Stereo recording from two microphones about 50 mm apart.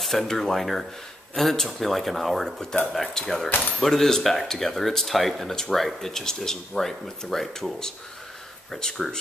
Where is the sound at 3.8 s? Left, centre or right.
Centre.